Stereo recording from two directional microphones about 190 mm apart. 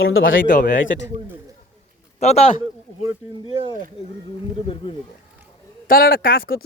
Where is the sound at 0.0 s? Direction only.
90° left.